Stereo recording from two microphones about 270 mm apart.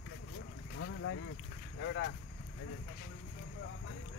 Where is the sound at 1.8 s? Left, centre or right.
Left.